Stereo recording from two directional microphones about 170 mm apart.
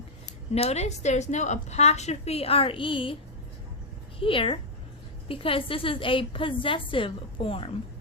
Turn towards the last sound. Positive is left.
turn(degrees=30)  # may be behind; listen again after turning